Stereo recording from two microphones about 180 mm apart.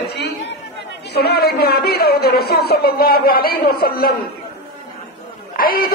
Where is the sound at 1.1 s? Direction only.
60° left (ahead or behind).